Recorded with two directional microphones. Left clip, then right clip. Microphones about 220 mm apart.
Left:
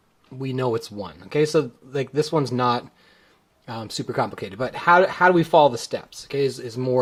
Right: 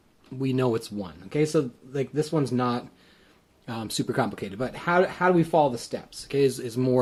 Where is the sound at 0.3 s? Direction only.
15° left (ahead or behind).